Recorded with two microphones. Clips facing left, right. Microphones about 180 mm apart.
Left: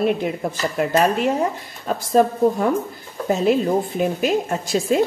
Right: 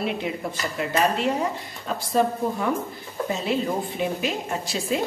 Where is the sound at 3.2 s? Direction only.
50° left (ahead or behind).